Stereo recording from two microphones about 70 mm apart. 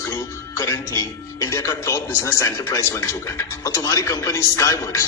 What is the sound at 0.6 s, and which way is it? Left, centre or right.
A man's voice, left.